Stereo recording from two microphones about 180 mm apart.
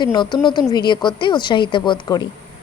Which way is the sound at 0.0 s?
25° left (ahead or behind).